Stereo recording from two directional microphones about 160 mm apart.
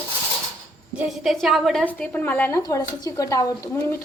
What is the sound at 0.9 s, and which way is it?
A woman's voice, centre (ahead or behind).